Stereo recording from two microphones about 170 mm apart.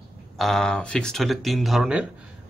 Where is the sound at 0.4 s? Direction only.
Centre (ahead or behind).